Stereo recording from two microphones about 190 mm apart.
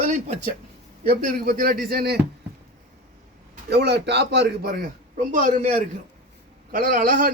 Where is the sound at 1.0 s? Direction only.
50° right (ahead or behind).